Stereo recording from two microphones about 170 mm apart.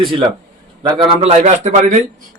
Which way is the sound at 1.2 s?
40° right (ahead or behind).